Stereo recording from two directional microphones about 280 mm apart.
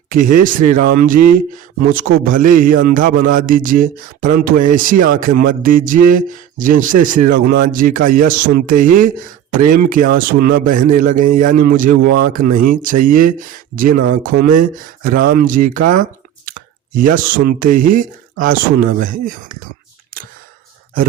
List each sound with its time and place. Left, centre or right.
0.1 s a man's voice: right